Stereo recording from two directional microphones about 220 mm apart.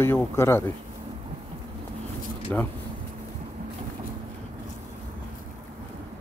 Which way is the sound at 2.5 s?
5° left (ahead or behind).